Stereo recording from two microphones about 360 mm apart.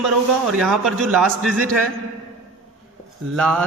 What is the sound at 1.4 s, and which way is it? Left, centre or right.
Speech, right.